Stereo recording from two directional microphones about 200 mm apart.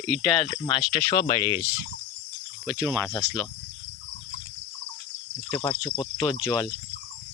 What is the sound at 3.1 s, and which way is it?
Speech, 15° left (ahead or behind).